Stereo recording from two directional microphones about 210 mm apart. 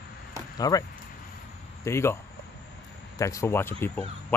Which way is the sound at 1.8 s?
10° left (ahead or behind).